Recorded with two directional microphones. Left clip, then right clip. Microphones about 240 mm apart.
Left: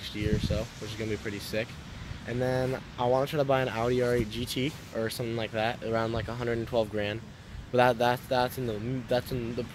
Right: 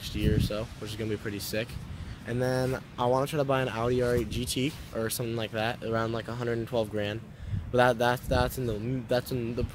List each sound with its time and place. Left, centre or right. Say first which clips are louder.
0.0 s speech: right 1 dB; centre